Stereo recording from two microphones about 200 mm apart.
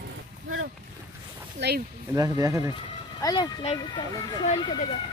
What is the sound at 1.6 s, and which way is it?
Speech, 60° right (ahead or behind).